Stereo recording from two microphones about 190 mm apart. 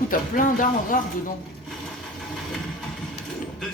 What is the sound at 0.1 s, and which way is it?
Speech, 45° left (ahead or behind).